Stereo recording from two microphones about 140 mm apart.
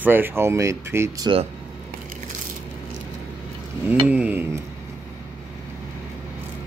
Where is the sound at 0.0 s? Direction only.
15° right (ahead or behind).